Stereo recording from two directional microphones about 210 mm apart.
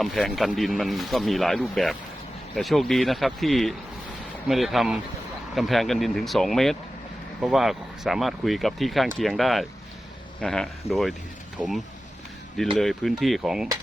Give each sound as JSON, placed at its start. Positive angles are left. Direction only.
{"t": 0.0, "sound": "speech", "side_deg": 0}
{"t": 12.7, "sound": "speech", "side_deg": 0}